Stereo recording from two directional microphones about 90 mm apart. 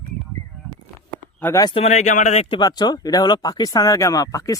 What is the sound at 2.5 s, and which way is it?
Speech, 55° left (ahead or behind).